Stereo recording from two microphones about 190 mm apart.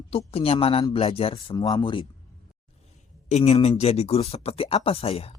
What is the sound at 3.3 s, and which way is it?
Speech, 35° left (ahead or behind).